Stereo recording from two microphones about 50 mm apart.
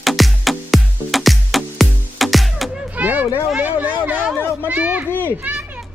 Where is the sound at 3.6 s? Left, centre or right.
Right.